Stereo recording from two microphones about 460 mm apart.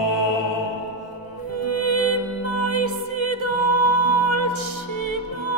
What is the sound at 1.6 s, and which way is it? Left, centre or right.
Music, right.